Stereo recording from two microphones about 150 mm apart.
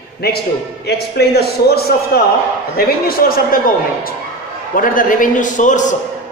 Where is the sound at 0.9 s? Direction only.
90° left.